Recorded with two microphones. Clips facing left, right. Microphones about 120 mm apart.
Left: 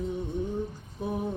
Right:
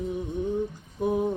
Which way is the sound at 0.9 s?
20° right (ahead or behind).